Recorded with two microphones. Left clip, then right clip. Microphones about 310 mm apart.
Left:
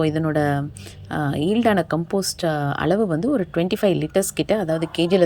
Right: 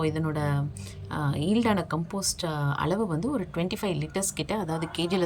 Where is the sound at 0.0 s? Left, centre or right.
Centre.